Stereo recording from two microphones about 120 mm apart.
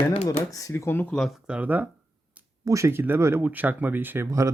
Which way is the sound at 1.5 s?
10° right (ahead or behind).